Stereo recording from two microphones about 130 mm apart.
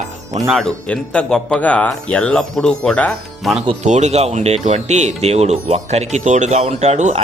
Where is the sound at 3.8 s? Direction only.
60° right (ahead or behind).